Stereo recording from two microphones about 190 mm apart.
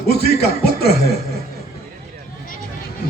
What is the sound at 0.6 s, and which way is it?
Mantra, 55° left (ahead or behind).